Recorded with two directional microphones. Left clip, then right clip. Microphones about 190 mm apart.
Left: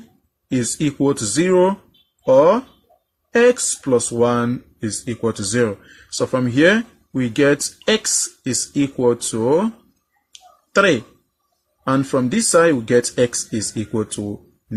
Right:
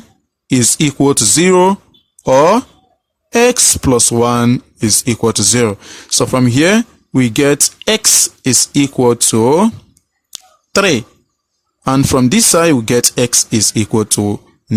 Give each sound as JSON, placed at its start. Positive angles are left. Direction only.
{"t": 0.5, "sound": "speech", "side_deg": -40}
{"t": 10.3, "sound": "a sound", "side_deg": -40}
{"t": 11.9, "sound": "speech", "side_deg": -40}